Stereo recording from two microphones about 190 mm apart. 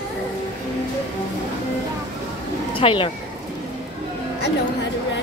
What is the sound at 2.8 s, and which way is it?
Speech, 30° left (ahead or behind).